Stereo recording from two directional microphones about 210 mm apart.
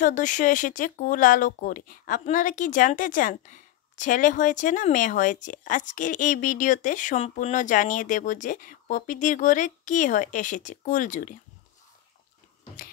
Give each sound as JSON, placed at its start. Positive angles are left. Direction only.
{"t": 0.0, "sound": "speech", "side_deg": 40}